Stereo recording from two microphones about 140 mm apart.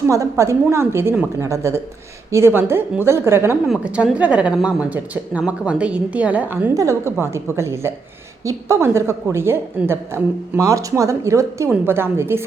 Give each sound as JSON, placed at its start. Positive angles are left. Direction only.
{"t": 0.1, "sound": "a woman's voice", "side_deg": -20}
{"t": 3.7, "sound": "a woman's voice", "side_deg": -5}